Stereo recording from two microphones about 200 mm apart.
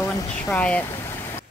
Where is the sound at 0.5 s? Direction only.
5° left (ahead or behind).